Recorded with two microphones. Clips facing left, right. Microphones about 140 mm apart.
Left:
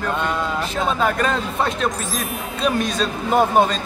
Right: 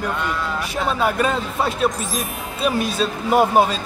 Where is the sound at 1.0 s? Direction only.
5° right (ahead or behind).